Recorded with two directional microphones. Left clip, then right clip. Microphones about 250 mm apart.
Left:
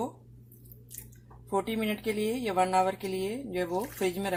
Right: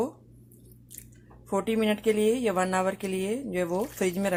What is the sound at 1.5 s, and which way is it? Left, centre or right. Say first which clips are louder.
Speech: right 4 dB; right.